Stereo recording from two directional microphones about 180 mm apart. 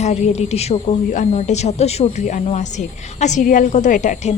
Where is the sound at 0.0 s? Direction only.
40° left (ahead or behind).